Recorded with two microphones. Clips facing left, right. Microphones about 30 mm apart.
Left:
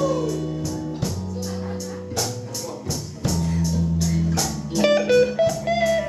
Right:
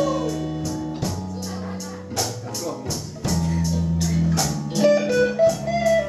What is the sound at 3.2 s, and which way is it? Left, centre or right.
Music, centre.